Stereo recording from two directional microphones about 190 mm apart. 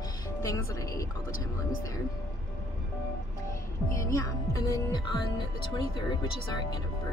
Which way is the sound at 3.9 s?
15° left (ahead or behind).